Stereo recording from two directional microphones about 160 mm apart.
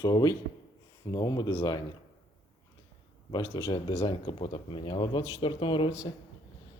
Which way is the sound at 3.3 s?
25° left (ahead or behind).